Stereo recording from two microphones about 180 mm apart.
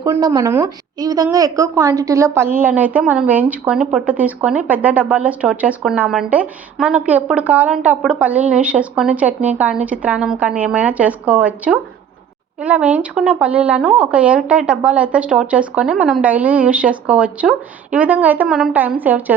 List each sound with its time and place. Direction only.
0.0 s speech: 20° right (ahead or behind)